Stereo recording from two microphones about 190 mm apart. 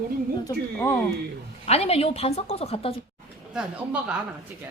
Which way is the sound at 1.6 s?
30° left (ahead or behind).